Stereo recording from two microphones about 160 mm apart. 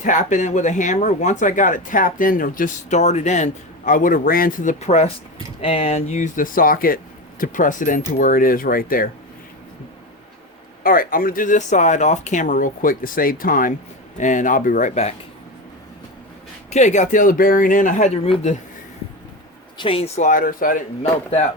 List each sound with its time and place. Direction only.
0.0 s speech: 50° left (ahead or behind)
10.8 s speech: 60° left (ahead or behind); by 15.1 s 45° left (ahead or behind)
16.6 s speech: 45° left (ahead or behind)
19.8 s speech: 35° left (ahead or behind); by 20.8 s 60° left (ahead or behind)
21.0 s speech: 45° left (ahead or behind)